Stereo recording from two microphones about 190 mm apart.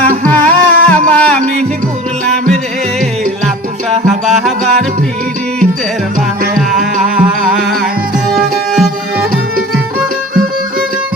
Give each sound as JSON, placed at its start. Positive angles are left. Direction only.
{"t": 0.0, "sound": "music", "side_deg": 5}
{"t": 4.0, "sound": "music", "side_deg": 0}
{"t": 6.6, "sound": "music", "side_deg": 0}